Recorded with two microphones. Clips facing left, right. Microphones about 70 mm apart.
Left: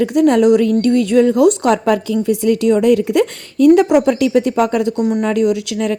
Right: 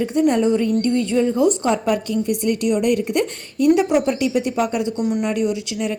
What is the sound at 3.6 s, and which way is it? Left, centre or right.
A woman's voice, left.